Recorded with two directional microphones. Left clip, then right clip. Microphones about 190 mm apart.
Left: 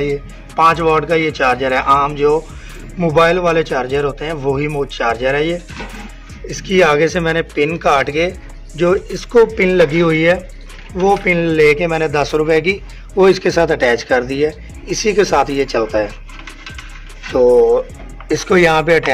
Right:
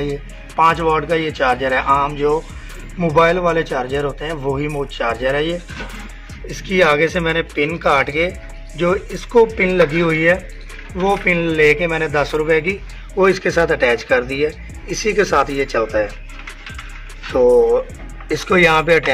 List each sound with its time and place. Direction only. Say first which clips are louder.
0.6 s speech: left 3 dB; 20° left (ahead or behind)
6.8 s speech: left 2 dB; 25° left (ahead or behind)
9.6 s speech: left 3 dB; 25° left (ahead or behind)
17.3 s speech: left 2 dB; 15° left (ahead or behind)